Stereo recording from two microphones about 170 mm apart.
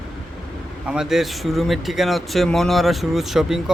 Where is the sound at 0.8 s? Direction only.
5° right (ahead or behind).